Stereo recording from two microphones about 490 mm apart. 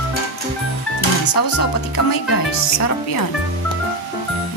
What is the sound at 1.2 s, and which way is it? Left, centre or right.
Speech, left.